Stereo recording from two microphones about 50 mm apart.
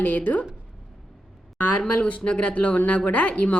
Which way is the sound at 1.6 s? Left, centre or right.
Left.